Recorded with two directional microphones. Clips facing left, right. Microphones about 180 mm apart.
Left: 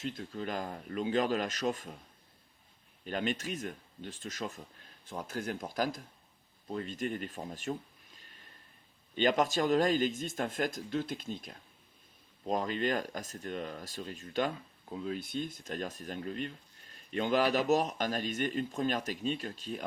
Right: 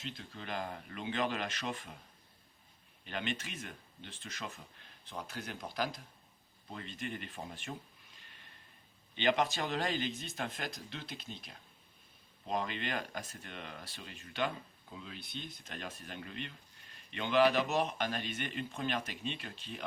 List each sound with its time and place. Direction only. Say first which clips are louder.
0.0 s speech: left 8 dB; 50° left (ahead or behind)
3.1 s speech: left 6 dB; 40° left (ahead or behind)
9.1 s speech: left 3 dB; 45° left (ahead or behind)